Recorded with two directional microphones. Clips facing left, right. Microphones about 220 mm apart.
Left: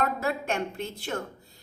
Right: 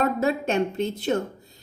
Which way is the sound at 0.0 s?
20° right (ahead or behind).